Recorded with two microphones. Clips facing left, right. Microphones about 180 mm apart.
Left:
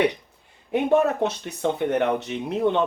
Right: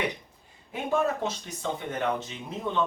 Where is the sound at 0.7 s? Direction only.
65° left (ahead or behind).